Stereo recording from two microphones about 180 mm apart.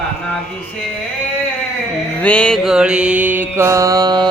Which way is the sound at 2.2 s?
5° left (ahead or behind).